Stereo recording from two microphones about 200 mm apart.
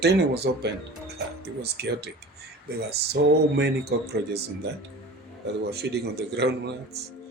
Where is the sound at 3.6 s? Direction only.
55° right (ahead or behind).